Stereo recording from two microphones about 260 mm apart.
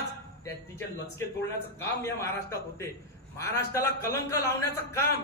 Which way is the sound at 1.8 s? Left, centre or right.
Centre.